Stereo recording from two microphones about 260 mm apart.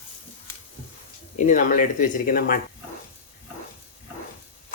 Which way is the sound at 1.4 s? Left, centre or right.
Left.